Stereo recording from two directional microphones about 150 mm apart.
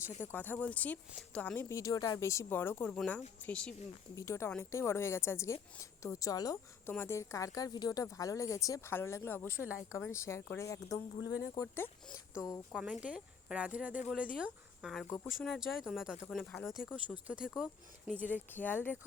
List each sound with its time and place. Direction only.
0.2 s a woman's voice: 15° left (ahead or behind)
1.7 s a woman's voice: 25° left (ahead or behind)
3.0 s a woman's voice: centre (ahead or behind)
4.1 s a woman's voice: 20° left (ahead or behind)
12.7 s speech: 5° right (ahead or behind)
18.5 s a woman's voice: 10° left (ahead or behind)